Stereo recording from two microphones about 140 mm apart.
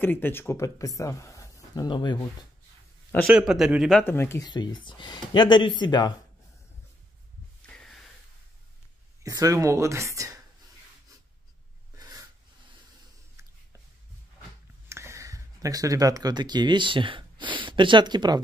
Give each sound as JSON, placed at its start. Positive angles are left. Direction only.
{"t": 0.0, "sound": "speech", "side_deg": 15}
{"t": 3.3, "sound": "a man's voice", "side_deg": -5}
{"t": 4.0, "sound": "speech", "side_deg": 15}
{"t": 4.5, "sound": "speech", "side_deg": 30}
{"t": 7.6, "sound": "snort", "side_deg": 5}
{"t": 9.2, "sound": "speech", "side_deg": -25}
{"t": 12.0, "sound": "snort", "side_deg": -25}
{"t": 14.9, "sound": "speech", "side_deg": -20}